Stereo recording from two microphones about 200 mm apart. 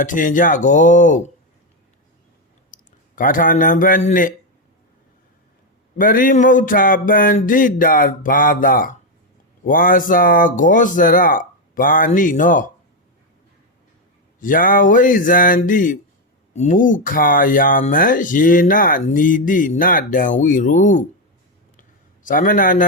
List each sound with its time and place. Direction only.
0.0 s speech: 40° left (ahead or behind)
2.6 s speech: 40° left (ahead or behind)
6.0 s speech: 45° left (ahead or behind)
14.3 s speech: 45° left (ahead or behind)
21.8 s a sound: 40° left (ahead or behind)